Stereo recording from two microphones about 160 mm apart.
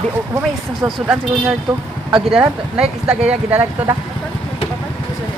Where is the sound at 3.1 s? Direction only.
10° right (ahead or behind).